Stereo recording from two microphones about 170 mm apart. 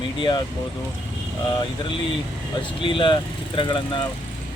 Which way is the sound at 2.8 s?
30° left (ahead or behind).